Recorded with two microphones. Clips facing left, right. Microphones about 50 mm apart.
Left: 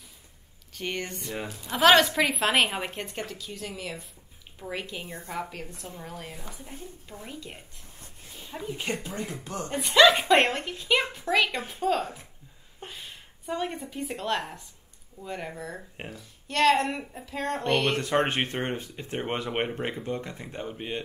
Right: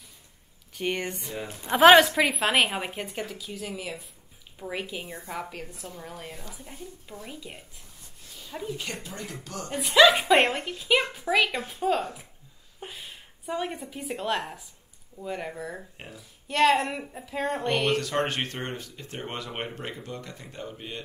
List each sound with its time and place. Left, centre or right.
0.7 s speech: centre
1.5 s speech: right
2.1 s a woman's voice: centre
8.0 s a sound: left
8.6 s speech: left
9.7 s a woman's voice: centre
17.9 s speech: left